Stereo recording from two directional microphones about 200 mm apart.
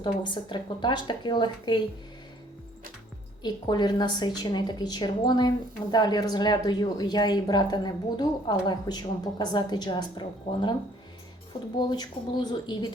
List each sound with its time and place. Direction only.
0.0 s a woman's voice: 25° left (ahead or behind)
3.4 s a woman's voice: 20° left (ahead or behind)
11.8 s a woman's voice: 20° left (ahead or behind)